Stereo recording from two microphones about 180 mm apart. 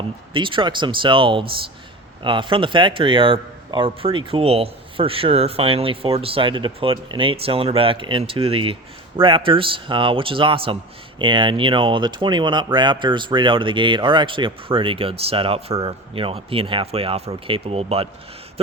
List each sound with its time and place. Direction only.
0.3 s speech: 25° right (ahead or behind)